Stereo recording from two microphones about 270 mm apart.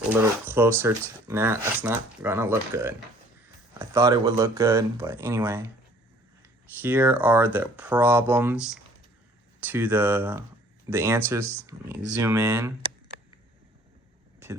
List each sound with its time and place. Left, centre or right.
0.1 s speech: centre
6.8 s speech: centre